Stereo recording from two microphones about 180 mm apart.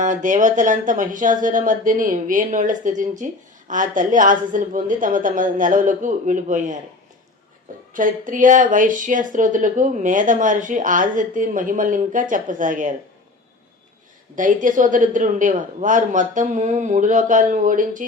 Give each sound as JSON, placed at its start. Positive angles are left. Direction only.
{"t": 0.0, "sound": "speech", "side_deg": -45}
{"t": 7.9, "sound": "speech", "side_deg": -50}
{"t": 14.3, "sound": "speech", "side_deg": -45}